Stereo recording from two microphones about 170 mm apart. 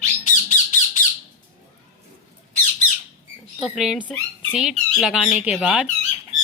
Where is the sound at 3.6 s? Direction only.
Centre (ahead or behind).